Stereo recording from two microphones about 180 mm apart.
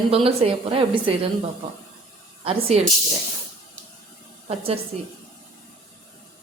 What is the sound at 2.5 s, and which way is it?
Speech, 35° right (ahead or behind).